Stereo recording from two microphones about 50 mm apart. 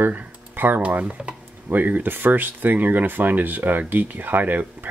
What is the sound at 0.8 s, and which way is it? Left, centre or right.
Speech, right.